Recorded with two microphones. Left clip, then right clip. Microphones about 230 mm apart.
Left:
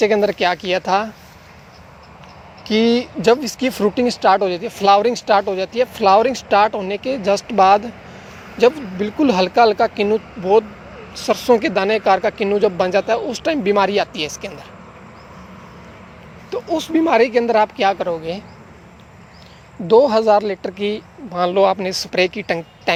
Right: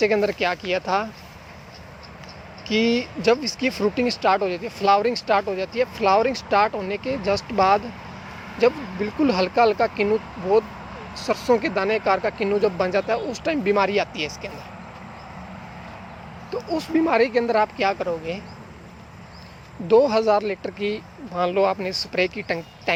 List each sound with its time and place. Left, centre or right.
0.0 s speech: left
2.6 s speech: left
16.5 s speech: left
19.9 s speech: left